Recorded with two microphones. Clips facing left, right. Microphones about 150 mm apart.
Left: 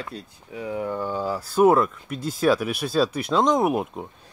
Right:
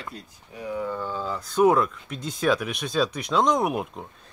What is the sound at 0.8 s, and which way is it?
Speech, 45° left (ahead or behind).